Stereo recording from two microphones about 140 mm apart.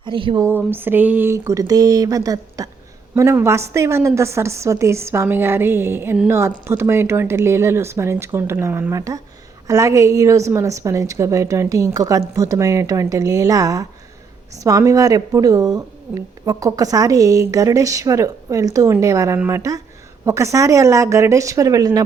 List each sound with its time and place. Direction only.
0.0 s speech: 35° right (ahead or behind)
0.4 s speech: 15° right (ahead or behind)